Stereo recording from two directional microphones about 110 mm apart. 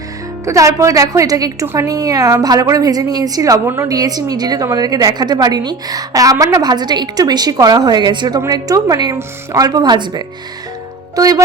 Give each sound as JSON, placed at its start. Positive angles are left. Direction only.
{"t": 0.4, "sound": "a woman's voice", "side_deg": -30}